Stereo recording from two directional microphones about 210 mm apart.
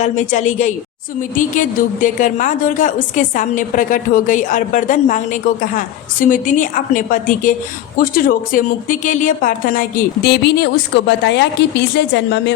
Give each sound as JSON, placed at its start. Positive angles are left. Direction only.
{"t": 0.0, "sound": "a woman's voice", "side_deg": 35}
{"t": 10.2, "sound": "a woman's voice", "side_deg": 50}